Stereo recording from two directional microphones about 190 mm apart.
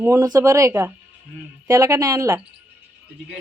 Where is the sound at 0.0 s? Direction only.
15° right (ahead or behind).